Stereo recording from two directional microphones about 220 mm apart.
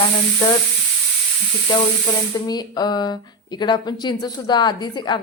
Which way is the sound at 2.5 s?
20° left (ahead or behind).